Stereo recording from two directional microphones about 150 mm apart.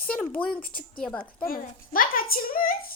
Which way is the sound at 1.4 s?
75° left (ahead or behind).